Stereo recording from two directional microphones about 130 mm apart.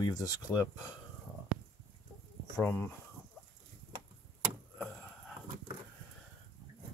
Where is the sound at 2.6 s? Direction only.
15° left (ahead or behind).